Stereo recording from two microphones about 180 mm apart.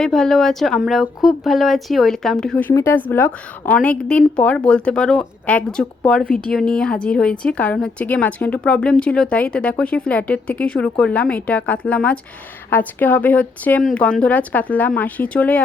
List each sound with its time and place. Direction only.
0.0 s a woman's voice: centre (ahead or behind)